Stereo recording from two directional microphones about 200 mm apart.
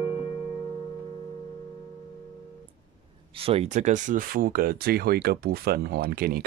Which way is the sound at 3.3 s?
30° right (ahead or behind).